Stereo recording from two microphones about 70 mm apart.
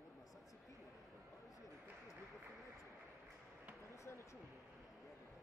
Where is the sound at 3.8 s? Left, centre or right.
Left.